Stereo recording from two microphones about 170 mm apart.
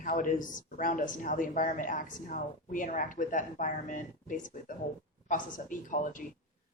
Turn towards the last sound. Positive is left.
turn(degrees=50)  # may be behind; listen again after turning